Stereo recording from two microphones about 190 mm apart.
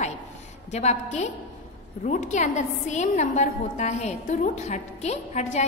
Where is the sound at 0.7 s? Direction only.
35° left (ahead or behind).